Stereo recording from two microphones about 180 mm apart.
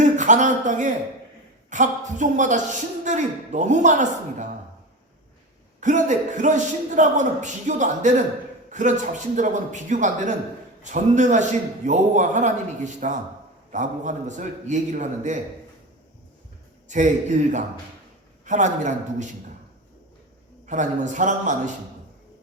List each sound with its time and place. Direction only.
0.0 s a man's voice: 45° right (ahead or behind)
5.8 s a man's voice: 40° right (ahead or behind)
16.9 s a man's voice: 40° right (ahead or behind)
20.7 s a man's voice: 45° right (ahead or behind)